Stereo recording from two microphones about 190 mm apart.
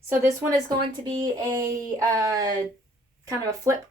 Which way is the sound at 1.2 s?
20° right (ahead or behind).